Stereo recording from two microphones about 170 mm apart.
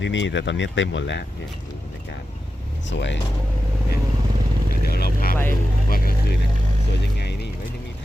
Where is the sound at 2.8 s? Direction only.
90° left.